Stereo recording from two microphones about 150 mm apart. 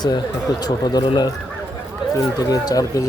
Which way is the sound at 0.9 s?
25° left (ahead or behind).